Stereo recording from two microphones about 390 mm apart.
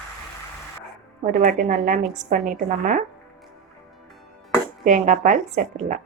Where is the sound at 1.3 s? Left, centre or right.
Right.